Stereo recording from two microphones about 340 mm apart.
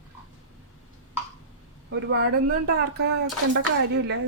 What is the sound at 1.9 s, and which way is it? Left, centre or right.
Speech, right.